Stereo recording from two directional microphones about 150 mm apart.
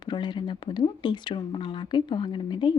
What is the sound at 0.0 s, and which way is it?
Speech, 30° left (ahead or behind).